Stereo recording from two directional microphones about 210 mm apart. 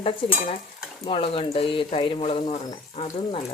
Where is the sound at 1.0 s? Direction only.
25° left (ahead or behind).